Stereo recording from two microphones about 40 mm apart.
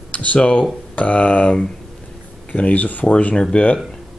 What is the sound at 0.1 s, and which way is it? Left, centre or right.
Speech, left.